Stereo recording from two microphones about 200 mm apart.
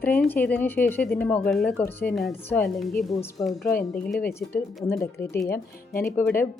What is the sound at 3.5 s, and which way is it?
Speech, 50° left (ahead or behind).